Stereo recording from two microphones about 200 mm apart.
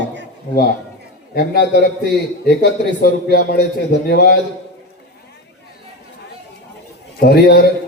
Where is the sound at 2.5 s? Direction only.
50° left (ahead or behind).